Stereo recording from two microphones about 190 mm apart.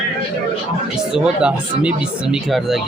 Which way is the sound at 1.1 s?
5° right (ahead or behind).